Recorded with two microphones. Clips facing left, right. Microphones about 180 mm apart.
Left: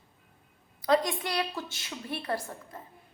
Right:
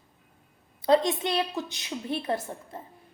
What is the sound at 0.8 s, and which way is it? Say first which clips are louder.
A woman's voice: right 4 dB; 25° right (ahead or behind).